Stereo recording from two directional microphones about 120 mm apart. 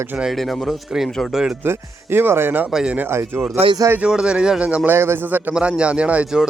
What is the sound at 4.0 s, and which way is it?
A man's voice, 5° right (ahead or behind).